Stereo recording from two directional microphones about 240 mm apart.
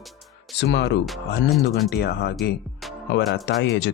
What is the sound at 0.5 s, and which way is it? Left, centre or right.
Speech, left.